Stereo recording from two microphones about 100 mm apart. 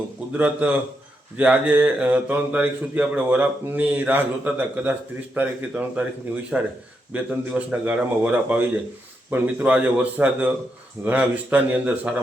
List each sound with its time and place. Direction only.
0.3 s a man's voice: 15° right (ahead or behind)